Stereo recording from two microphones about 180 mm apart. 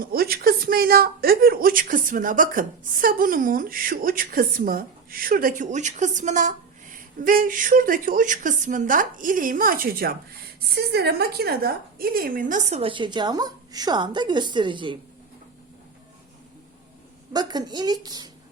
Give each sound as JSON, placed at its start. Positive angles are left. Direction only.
{"t": 0.0, "sound": "a woman's voice", "side_deg": -55}
{"t": 17.3, "sound": "a woman's voice", "side_deg": -25}